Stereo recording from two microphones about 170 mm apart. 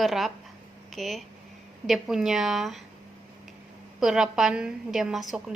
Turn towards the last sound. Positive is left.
turn(degrees=-5)  # may be behind; listen again after turning